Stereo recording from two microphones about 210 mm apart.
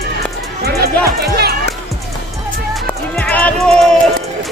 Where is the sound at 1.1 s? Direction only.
50° right (ahead or behind).